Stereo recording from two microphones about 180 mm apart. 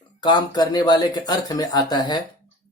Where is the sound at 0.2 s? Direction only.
25° left (ahead or behind).